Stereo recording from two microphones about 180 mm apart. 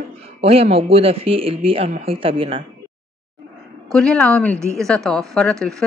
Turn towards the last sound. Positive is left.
turn(degrees=5)  # may be behind; listen again after turning